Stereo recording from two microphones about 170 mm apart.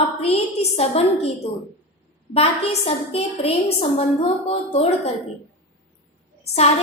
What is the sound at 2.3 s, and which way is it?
A woman's voice, 35° left (ahead or behind).